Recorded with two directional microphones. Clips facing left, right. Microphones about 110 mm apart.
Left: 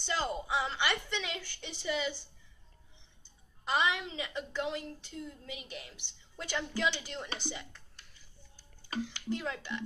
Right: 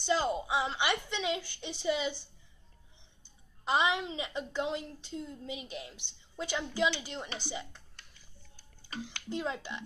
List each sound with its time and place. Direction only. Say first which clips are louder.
0.0 s a woman's voice: right 5 dB; 15° right (ahead or behind)
3.6 s a woman's voice: right 2 dB; 20° right (ahead or behind)
9.3 s a woman's voice: right 2 dB; 25° right (ahead or behind)